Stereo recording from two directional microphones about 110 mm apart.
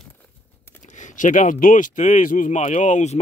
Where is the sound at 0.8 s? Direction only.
90° left.